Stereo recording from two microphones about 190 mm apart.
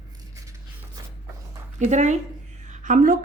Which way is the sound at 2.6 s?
40° right (ahead or behind).